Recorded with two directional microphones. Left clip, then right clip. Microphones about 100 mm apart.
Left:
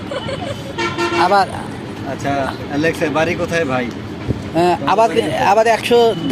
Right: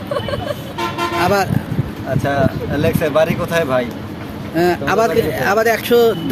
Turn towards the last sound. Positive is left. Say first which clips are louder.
# even
turn(degrees=-30)  # may be behind; listen again after turning